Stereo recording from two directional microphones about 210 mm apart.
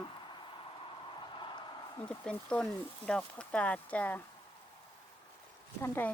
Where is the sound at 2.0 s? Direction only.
5° left (ahead or behind).